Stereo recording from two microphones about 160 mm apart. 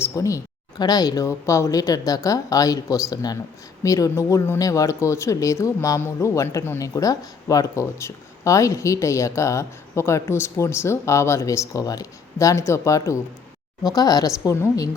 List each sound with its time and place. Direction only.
0.0 s a woman's voice: 20° left (ahead or behind)